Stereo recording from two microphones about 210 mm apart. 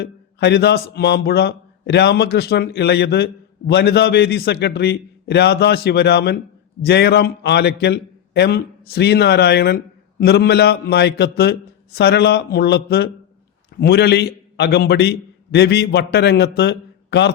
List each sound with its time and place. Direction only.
0.0 s a man's voice: 50° left (ahead or behind)